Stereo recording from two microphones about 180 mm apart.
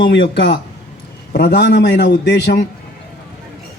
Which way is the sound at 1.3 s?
65° left (ahead or behind).